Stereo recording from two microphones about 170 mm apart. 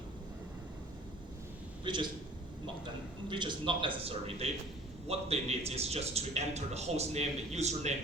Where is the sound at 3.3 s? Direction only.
25° right (ahead or behind).